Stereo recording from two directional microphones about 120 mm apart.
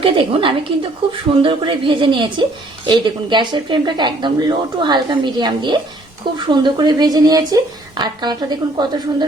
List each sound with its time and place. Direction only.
0.0 s a woman's voice: 45° right (ahead or behind)